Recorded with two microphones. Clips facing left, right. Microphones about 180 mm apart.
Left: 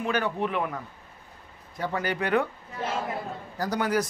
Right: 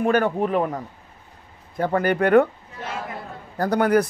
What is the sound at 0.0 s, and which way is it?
Speech, 50° right (ahead or behind).